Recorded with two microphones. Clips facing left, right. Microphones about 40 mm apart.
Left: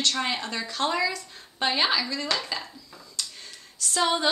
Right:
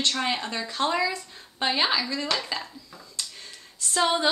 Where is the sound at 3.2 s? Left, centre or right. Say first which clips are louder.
Left 1 dB; centre.